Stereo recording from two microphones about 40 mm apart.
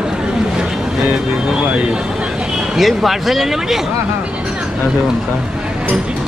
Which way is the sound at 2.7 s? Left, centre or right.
Centre.